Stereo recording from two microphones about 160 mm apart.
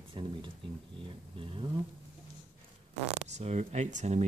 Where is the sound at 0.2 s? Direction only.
30° right (ahead or behind).